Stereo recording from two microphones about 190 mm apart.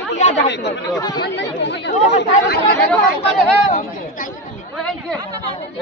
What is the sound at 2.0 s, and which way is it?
Speech, 40° left (ahead or behind).